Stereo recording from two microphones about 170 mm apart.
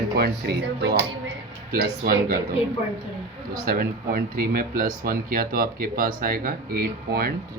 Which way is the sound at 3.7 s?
60° right (ahead or behind).